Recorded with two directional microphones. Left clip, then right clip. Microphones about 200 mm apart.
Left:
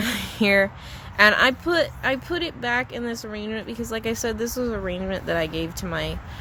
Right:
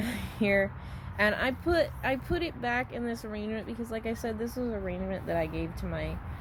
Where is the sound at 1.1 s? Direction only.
20° left (ahead or behind).